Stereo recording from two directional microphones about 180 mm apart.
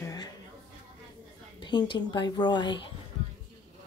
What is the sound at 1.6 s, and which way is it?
A woman's voice, 25° left (ahead or behind).